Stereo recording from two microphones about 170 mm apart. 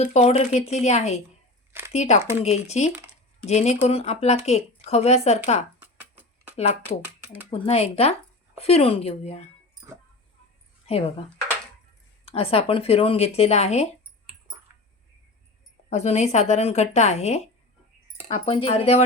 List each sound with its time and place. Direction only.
0.0 s speech: 40° left (ahead or behind)
5.8 s a sound: 10° right (ahead or behind)
7.5 s speech: 35° left (ahead or behind)
10.8 s speech: 35° left (ahead or behind)
12.2 s speech: 35° left (ahead or behind)
15.9 s speech: 40° left (ahead or behind)